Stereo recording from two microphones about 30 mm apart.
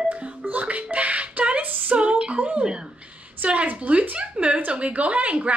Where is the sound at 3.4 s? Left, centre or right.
Right.